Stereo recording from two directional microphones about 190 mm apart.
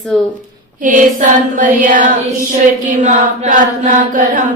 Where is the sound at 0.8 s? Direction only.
45° right (ahead or behind).